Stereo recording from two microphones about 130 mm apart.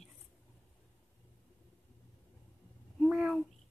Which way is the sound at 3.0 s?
5° right (ahead or behind).